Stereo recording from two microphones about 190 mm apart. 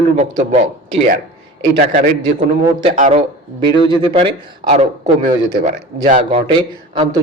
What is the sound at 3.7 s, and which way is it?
A man's voice, 25° right (ahead or behind).